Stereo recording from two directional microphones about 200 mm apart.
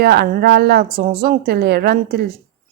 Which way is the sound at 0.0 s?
50° right (ahead or behind).